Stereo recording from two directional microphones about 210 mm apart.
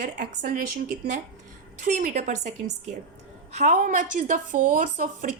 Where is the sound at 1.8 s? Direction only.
40° right (ahead or behind).